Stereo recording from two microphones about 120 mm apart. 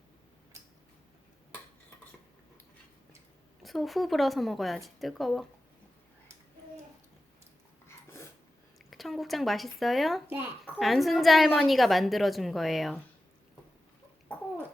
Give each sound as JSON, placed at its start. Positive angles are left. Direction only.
{"t": 3.6, "sound": "a woman's voice", "side_deg": 0}
{"t": 8.8, "sound": "speech", "side_deg": 0}
{"t": 10.2, "sound": "a child's voice", "side_deg": -20}
{"t": 10.8, "sound": "a woman's voice", "side_deg": 0}